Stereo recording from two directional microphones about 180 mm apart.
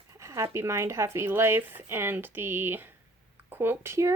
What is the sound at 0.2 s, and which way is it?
Speech, 15° right (ahead or behind).